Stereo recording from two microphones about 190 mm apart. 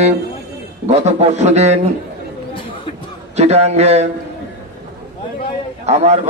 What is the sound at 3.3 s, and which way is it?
Speech, 35° right (ahead or behind).